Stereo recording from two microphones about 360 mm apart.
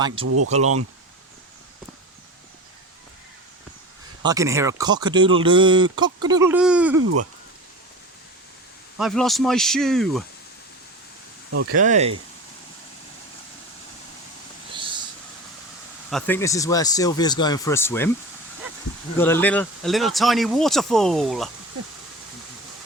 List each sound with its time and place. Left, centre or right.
0.3 s speech: right
4.2 s speech: centre
7.0 s speech: right
9.0 s speech: centre
11.5 s speech: right
11.8 s speech: centre
14.8 s a sound: centre
16.0 s speech: centre
19.1 s speech: centre